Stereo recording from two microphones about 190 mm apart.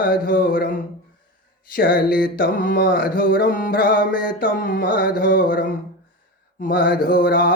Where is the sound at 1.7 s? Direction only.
50° left (ahead or behind).